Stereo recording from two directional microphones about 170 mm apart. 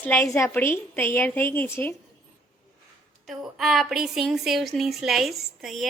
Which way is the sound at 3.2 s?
Centre (ahead or behind).